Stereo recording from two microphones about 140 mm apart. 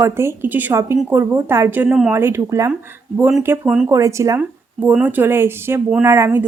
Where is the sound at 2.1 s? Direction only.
20° right (ahead or behind).